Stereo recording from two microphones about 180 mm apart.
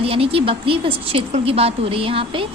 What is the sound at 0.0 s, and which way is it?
A woman's voice, 30° right (ahead or behind).